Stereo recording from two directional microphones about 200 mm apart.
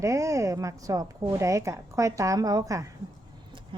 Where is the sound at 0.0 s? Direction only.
15° right (ahead or behind).